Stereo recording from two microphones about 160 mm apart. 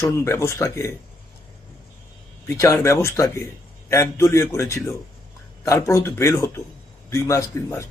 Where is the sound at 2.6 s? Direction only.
20° left (ahead or behind).